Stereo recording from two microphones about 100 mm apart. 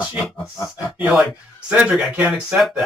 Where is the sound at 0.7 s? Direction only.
15° right (ahead or behind).